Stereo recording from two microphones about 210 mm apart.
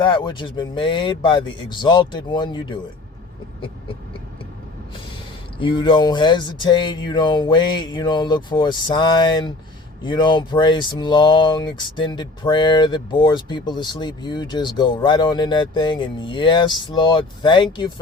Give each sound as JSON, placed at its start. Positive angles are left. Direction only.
{"t": 0.0, "sound": "speech", "side_deg": 20}
{"t": 5.5, "sound": "speech", "side_deg": 25}